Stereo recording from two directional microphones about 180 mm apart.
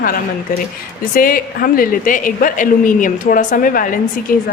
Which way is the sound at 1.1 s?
50° left (ahead or behind).